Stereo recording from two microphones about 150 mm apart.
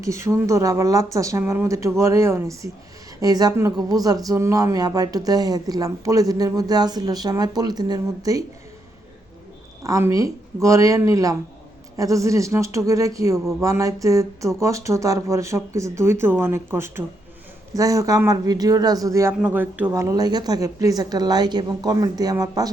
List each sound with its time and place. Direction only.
0.0 s speech: 20° right (ahead or behind)
9.8 s speech: 20° right (ahead or behind)